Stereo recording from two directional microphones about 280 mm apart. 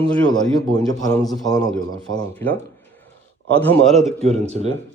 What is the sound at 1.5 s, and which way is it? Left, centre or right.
A man's voice, centre.